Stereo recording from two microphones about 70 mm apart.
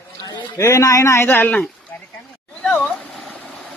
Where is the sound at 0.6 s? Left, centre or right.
Left.